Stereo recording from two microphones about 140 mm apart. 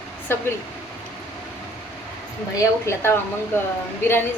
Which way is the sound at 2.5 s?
20° left (ahead or behind).